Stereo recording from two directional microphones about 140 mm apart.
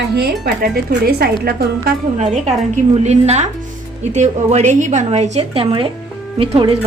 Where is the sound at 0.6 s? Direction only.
90° right.